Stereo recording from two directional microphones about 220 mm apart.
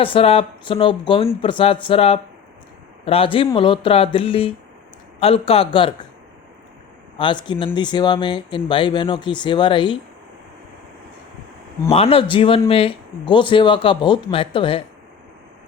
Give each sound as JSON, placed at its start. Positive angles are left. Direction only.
{"t": 0.0, "sound": "speech", "side_deg": 25}
{"t": 7.2, "sound": "speech", "side_deg": 20}
{"t": 11.9, "sound": "speech", "side_deg": 25}